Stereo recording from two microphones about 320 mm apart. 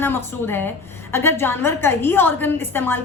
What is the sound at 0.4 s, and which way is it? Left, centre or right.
A woman's voice, centre.